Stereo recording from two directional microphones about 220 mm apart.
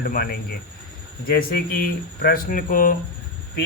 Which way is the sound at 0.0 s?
40° left (ahead or behind).